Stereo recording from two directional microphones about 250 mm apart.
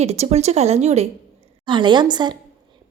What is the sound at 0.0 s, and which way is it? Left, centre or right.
A woman's voice, right.